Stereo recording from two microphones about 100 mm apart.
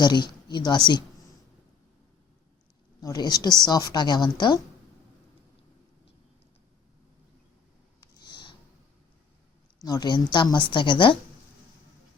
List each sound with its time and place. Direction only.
0.0 s a woman's voice: 45° left (ahead or behind)
3.0 s a woman's voice: 45° left (ahead or behind)
8.2 s a sound: 50° left (ahead or behind)
9.8 s a woman's voice: 40° left (ahead or behind)